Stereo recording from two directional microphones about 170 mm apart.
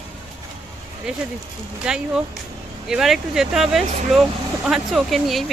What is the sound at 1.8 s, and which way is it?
Speech, 5° right (ahead or behind).